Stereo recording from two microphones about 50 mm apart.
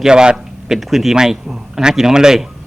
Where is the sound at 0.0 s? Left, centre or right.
Centre.